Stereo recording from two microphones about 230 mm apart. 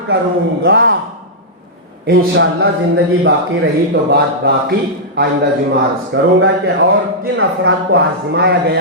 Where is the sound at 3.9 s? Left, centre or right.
Right.